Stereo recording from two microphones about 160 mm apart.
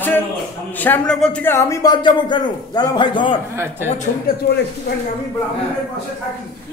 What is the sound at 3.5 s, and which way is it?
Speech, 15° right (ahead or behind).